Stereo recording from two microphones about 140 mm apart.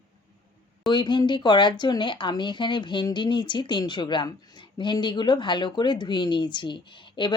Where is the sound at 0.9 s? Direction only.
35° left (ahead or behind).